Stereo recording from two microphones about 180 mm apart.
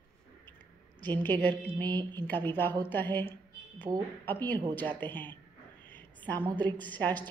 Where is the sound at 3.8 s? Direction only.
20° right (ahead or behind).